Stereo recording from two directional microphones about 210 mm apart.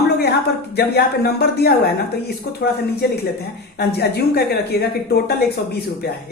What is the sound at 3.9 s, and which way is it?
Speech, 50° left (ahead or behind).